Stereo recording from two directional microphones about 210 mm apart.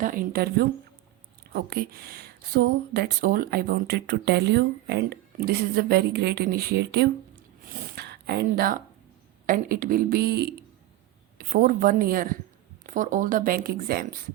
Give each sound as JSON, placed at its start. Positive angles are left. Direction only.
{"t": 0.0, "sound": "speech", "side_deg": -40}
{"t": 7.7, "sound": "a sound", "side_deg": -50}
{"t": 9.5, "sound": "speech", "side_deg": -45}